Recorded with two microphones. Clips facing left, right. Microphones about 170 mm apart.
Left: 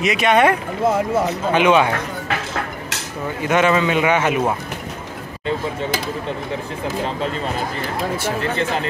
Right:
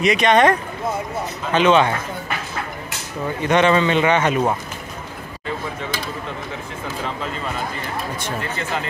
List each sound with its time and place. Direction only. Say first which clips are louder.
0.0 s speech: even; 5° left (ahead or behind)
0.8 s speech: left 8 dB; 90° left
1.5 s speech: even; 10° left (ahead or behind)
3.4 s speech: even; 5° left (ahead or behind)